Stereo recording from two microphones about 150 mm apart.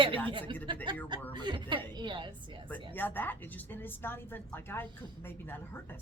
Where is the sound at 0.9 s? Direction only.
30° right (ahead or behind).